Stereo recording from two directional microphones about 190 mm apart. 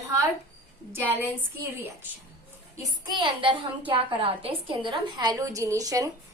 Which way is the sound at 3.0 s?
25° right (ahead or behind).